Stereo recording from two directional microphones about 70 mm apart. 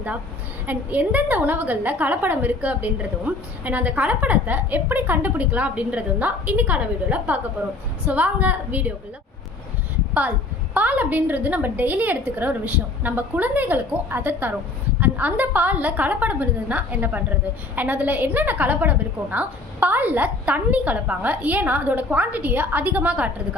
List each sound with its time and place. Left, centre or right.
0.7 s a woman's voice: right
10.8 s a woman's voice: right